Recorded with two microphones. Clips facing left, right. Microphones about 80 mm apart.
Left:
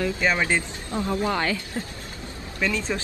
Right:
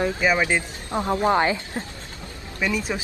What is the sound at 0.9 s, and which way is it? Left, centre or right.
Speech, right.